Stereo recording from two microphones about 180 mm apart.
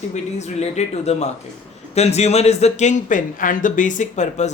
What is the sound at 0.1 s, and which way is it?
A man's voice, 40° left (ahead or behind).